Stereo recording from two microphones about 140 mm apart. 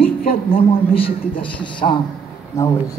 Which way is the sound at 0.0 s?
90° left.